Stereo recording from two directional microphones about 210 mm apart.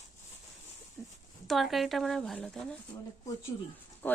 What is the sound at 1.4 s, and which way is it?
Speech, centre (ahead or behind).